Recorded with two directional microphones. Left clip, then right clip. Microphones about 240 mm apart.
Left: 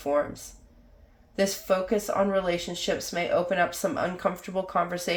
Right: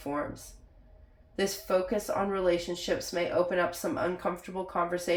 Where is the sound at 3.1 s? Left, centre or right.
Left.